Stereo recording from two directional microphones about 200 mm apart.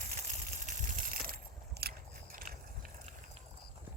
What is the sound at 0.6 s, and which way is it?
Coin, 40° right (ahead or behind).